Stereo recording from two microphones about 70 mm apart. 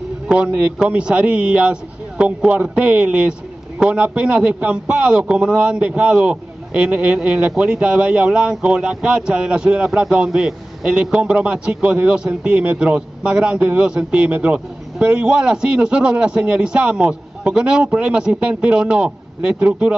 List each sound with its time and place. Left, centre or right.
0.3 s a man's voice: centre